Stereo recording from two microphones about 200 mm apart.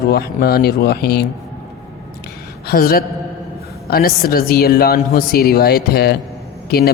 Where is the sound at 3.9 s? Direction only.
50° left (ahead or behind).